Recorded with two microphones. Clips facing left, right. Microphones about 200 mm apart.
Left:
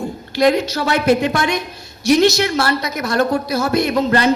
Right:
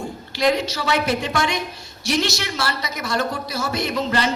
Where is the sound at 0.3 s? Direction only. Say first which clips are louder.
Left 5 dB; 55° left (ahead or behind).